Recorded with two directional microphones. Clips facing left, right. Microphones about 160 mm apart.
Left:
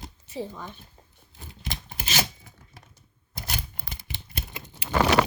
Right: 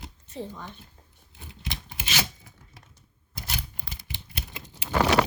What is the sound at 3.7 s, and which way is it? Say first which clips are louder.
Scissors: left 1 dB; 50° left (ahead or behind).